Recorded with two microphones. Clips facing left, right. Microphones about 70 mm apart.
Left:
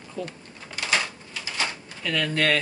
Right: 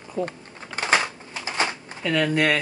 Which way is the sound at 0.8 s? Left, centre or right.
Right.